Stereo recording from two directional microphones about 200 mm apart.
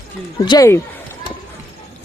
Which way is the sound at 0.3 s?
20° left (ahead or behind).